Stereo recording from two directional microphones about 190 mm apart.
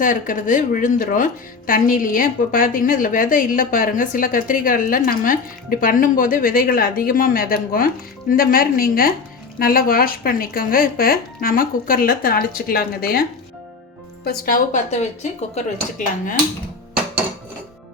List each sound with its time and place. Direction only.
0.0 s speech: 45° left (ahead or behind)
14.3 s speech: 50° left (ahead or behind)